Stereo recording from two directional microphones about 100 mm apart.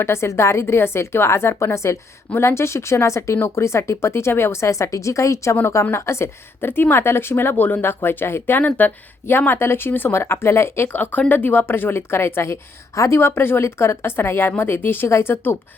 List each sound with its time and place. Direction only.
0.0 s a woman's voice: 25° left (ahead or behind)